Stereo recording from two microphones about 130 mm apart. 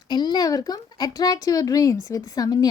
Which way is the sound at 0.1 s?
35° left (ahead or behind).